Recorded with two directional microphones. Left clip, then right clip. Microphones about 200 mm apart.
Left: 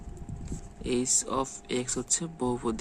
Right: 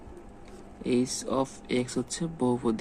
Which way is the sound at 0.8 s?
5° left (ahead or behind).